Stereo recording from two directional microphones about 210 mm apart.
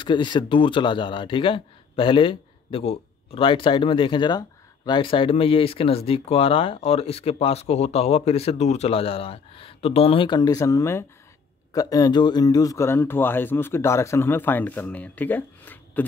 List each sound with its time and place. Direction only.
0.0 s a man's voice: 20° left (ahead or behind)